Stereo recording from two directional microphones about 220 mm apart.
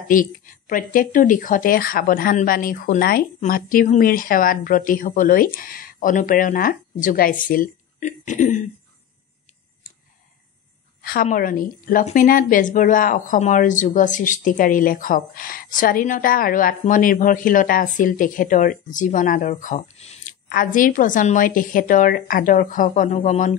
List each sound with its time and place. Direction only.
0.1 s a woman's voice: 40° left (ahead or behind)
11.0 s a woman's voice: 40° left (ahead or behind)
20.4 s a woman's voice: 40° left (ahead or behind)